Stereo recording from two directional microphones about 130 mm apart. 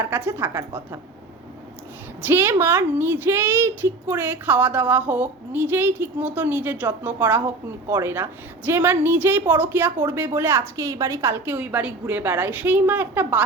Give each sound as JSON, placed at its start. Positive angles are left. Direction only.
{"t": 0.0, "sound": "a woman's voice", "side_deg": -15}
{"t": 2.2, "sound": "a woman's voice", "side_deg": -15}